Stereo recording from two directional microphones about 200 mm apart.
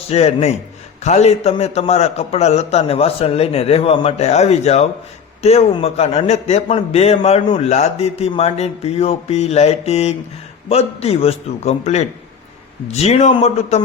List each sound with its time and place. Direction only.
0.1 s a man's voice: 30° left (ahead or behind)